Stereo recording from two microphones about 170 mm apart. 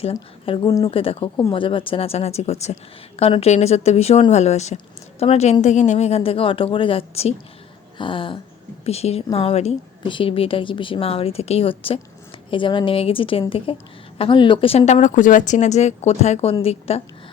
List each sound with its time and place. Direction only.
0.0 s a woman's voice: 35° left (ahead or behind)
7.9 s a sound: 30° left (ahead or behind)
8.8 s a woman's voice: 35° left (ahead or behind)